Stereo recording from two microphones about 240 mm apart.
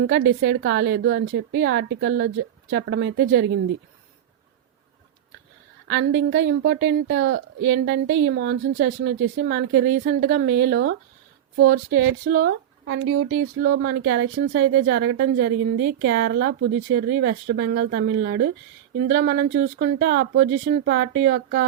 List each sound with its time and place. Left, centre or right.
0.0 s a woman's voice: right
5.9 s a woman's voice: right